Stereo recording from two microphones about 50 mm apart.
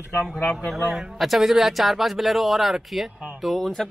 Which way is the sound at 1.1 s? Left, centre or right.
Centre.